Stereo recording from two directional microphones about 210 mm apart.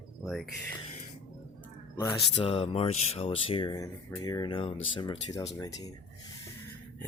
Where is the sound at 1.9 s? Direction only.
15° left (ahead or behind).